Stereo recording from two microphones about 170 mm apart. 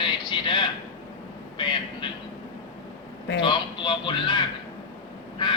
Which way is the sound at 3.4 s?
30° left (ahead or behind).